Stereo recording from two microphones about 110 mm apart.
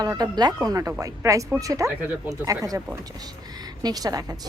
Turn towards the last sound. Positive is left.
turn(degrees=-35)  # may be behind; listen again after turning